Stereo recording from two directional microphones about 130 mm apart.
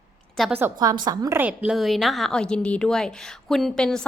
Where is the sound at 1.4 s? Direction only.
10° right (ahead or behind).